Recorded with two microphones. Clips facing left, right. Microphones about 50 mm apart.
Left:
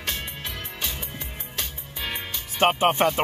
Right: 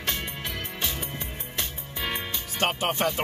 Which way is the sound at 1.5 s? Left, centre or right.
Right.